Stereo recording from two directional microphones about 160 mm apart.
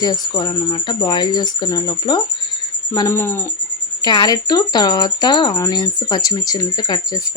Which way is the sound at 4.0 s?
25° left (ahead or behind).